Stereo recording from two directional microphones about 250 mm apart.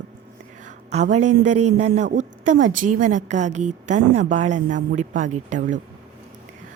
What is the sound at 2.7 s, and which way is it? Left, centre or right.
Speech, right.